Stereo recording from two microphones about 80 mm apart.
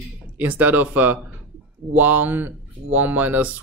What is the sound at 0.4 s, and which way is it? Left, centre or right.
Speech, right.